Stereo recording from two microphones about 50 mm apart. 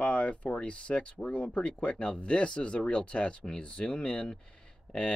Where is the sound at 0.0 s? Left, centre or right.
Left.